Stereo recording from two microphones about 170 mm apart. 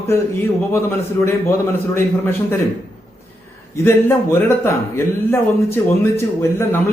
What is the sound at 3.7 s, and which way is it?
A man's voice, 15° left (ahead or behind).